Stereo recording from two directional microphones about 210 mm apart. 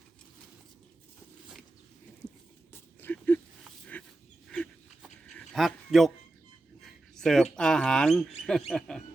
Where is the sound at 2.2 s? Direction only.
5° left (ahead or behind).